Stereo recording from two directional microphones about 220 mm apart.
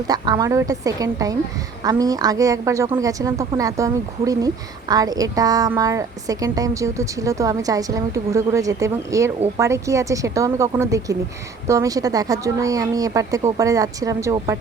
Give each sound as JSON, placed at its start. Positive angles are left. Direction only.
{"t": 0.1, "sound": "a woman's voice", "side_deg": -15}